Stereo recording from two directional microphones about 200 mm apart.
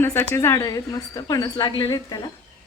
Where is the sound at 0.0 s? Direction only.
10° left (ahead or behind).